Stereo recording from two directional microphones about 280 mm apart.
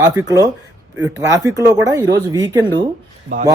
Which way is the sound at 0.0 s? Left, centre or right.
Centre.